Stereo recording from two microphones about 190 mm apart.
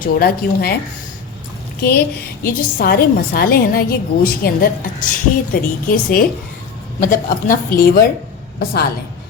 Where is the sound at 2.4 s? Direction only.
50° left (ahead or behind).